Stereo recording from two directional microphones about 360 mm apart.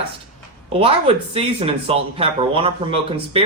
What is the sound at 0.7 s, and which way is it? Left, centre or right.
Speech, centre.